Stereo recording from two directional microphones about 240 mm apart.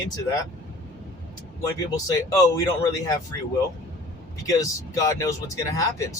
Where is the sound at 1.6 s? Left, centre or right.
Centre.